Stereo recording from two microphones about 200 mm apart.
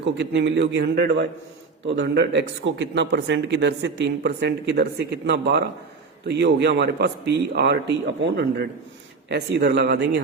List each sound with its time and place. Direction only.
0.0 s a man's voice: 60° right (ahead or behind)